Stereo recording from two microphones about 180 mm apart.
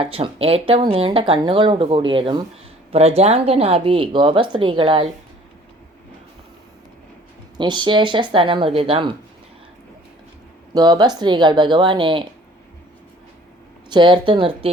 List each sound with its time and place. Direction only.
0.0 s a woman's voice: 30° right (ahead or behind)
7.5 s speech: 25° right (ahead or behind)
10.8 s speech: 20° right (ahead or behind)
13.9 s speech: 25° right (ahead or behind)